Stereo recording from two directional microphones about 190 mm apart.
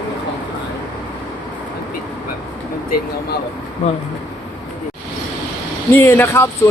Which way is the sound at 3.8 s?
35° left (ahead or behind).